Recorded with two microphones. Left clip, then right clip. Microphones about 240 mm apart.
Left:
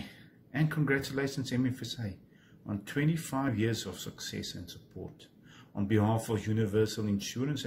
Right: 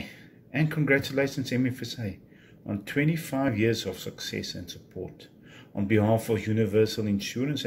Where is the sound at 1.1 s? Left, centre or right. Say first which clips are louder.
Right 6 dB; centre.